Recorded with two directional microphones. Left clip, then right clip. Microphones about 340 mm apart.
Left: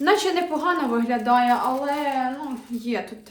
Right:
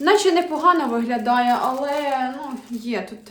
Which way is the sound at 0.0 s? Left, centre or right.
Centre.